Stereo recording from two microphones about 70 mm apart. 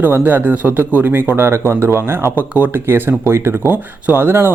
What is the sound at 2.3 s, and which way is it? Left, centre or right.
A man's voice, right.